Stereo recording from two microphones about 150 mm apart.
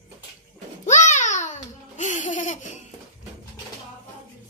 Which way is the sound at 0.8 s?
55° left (ahead or behind).